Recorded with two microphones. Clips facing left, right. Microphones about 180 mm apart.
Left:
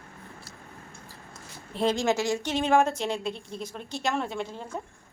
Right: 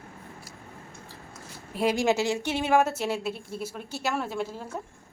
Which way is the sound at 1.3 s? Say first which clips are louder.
Even; 10° right (ahead or behind).